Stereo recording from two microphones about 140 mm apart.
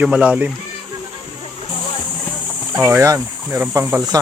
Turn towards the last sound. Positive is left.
turn(degrees=-15)  # may be behind; listen again after turning